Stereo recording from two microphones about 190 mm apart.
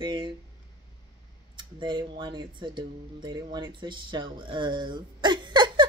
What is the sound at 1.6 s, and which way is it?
A woman's voice, 25° right (ahead or behind).